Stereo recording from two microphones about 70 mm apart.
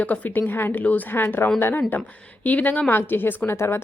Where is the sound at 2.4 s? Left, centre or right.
Left.